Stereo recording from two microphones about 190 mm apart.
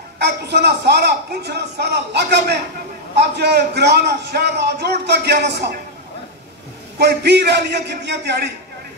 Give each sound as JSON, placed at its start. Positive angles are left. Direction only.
{"t": 0.2, "sound": "a man's voice", "side_deg": -60}
{"t": 7.0, "sound": "a man's voice", "side_deg": -60}